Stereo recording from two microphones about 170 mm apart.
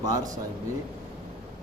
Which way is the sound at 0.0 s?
20° right (ahead or behind).